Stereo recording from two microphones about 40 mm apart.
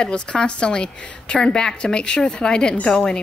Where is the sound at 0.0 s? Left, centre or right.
Left.